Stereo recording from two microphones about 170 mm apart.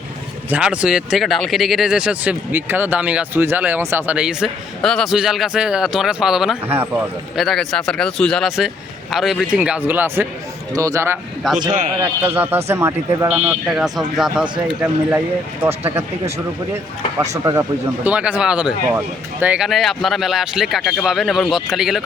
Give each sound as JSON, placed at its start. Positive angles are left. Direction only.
{"t": 0.5, "sound": "speech", "side_deg": -5}